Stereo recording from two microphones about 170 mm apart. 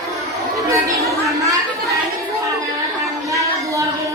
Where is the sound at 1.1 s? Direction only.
20° right (ahead or behind).